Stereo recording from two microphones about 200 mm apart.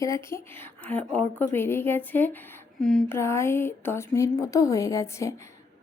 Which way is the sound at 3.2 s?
15° left (ahead or behind).